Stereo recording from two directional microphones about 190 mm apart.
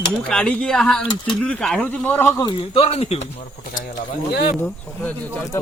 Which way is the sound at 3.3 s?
45° left (ahead or behind).